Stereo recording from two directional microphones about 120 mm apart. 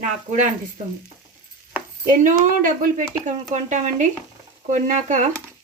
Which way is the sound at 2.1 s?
90° right.